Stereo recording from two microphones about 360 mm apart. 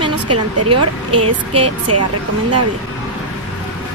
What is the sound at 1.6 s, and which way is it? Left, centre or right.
Speech, right.